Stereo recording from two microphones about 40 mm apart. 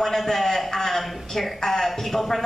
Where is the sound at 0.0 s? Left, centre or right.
Centre.